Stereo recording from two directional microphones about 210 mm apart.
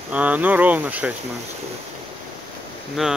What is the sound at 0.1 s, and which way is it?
Speech, 5° right (ahead or behind).